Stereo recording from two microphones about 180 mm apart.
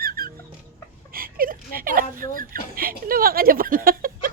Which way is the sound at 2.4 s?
55° right (ahead or behind).